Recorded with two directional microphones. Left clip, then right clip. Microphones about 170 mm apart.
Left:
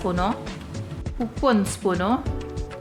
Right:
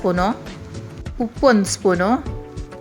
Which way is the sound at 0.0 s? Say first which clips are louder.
Right 5 dB; 35° right (ahead or behind).